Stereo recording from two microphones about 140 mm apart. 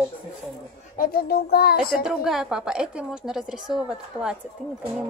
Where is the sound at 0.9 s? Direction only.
90° left.